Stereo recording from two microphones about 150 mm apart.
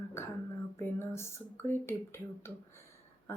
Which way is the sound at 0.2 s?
15° left (ahead or behind).